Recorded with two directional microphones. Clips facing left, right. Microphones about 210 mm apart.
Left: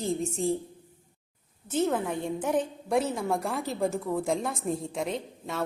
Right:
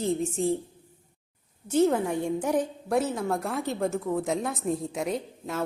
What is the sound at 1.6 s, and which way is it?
A woman's voice, 10° right (ahead or behind).